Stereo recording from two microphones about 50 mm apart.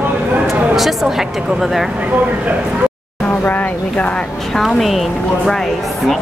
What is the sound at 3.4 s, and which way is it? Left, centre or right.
Speech, left.